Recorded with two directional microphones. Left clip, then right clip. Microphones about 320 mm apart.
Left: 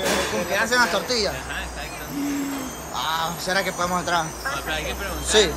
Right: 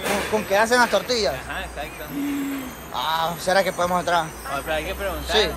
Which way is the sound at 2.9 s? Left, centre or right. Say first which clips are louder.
Right 2 dB; centre.